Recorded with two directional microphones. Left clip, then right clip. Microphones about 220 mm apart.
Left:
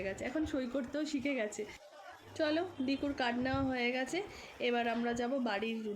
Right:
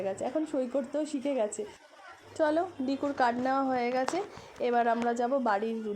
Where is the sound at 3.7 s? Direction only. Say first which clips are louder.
Right 6 dB; 25° right (ahead or behind).